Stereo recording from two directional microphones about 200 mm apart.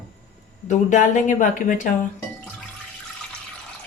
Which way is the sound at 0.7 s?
35° left (ahead or behind).